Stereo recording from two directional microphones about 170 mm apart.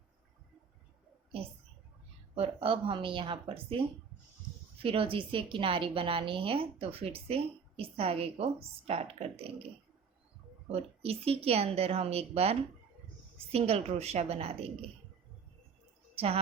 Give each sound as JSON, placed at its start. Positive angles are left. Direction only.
{"t": 2.3, "sound": "a woman's voice", "side_deg": -35}
{"t": 10.7, "sound": "a woman's voice", "side_deg": -35}
{"t": 16.1, "sound": "a woman's voice", "side_deg": -35}